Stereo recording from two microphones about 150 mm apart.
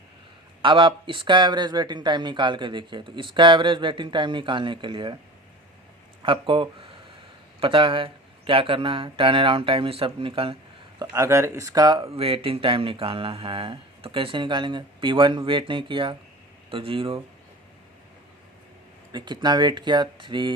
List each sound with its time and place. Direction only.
0.6 s speech: 35° right (ahead or behind)
6.2 s speech: 35° right (ahead or behind)
11.0 s speech: 20° right (ahead or behind)
19.1 s speech: 30° right (ahead or behind)